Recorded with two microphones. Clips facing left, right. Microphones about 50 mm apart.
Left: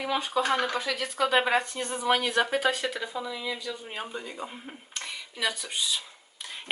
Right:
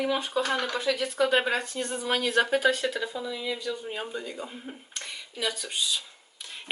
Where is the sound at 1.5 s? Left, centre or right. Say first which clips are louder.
Left 2 dB; left.